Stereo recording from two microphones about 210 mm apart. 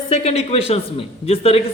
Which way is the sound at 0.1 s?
30° left (ahead or behind).